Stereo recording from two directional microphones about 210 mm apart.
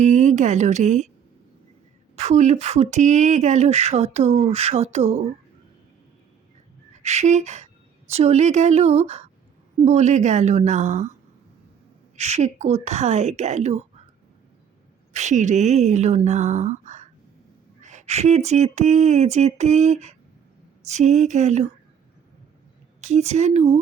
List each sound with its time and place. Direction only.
0.0 s speech: 35° right (ahead or behind)
2.1 s speech: 35° right (ahead or behind)
7.0 s speech: 30° right (ahead or behind)
12.1 s speech: 30° right (ahead or behind)
15.1 s speech: 35° right (ahead or behind)
23.0 s speech: 30° right (ahead or behind)